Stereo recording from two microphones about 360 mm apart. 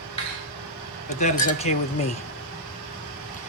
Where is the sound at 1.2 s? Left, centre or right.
Centre.